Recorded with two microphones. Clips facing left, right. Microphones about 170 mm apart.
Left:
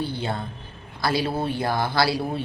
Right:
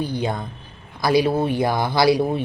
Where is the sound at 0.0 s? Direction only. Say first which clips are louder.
Right 4 dB; 15° right (ahead or behind).